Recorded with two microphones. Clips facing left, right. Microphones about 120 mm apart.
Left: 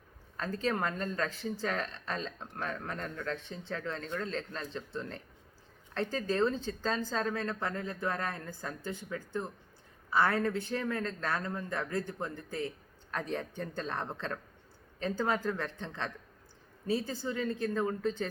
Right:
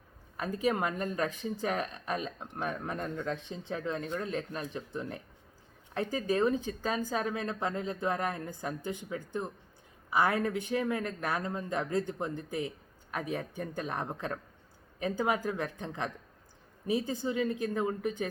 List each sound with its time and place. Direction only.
0.3 s speech: 10° right (ahead or behind)